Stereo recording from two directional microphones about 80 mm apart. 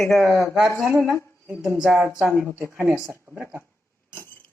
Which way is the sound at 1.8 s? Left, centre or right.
Right.